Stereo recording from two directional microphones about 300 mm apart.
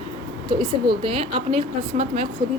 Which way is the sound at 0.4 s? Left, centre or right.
Centre.